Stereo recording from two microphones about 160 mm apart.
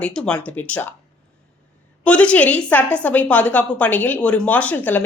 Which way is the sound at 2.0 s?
10° left (ahead or behind).